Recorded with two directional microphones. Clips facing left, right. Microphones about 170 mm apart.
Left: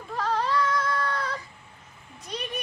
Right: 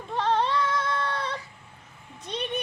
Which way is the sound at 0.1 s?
25° right (ahead or behind).